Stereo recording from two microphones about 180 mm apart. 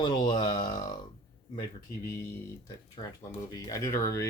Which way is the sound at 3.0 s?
25° left (ahead or behind).